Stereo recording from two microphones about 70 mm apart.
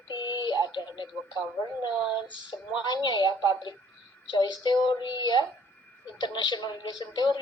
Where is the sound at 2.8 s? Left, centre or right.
Left.